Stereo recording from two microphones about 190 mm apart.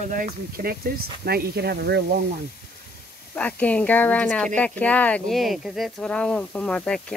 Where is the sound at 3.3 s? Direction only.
5° left (ahead or behind).